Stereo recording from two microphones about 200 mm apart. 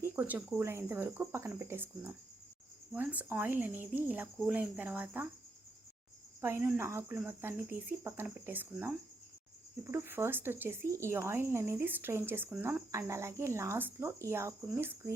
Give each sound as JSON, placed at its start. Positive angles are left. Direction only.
{"t": 0.0, "sound": "speech", "side_deg": -10}
{"t": 6.4, "sound": "speech", "side_deg": -10}